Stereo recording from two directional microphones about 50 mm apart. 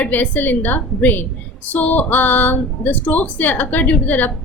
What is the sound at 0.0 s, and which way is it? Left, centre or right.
A woman's voice, left.